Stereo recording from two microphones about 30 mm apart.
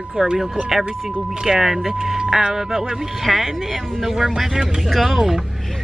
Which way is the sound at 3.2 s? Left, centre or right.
Centre.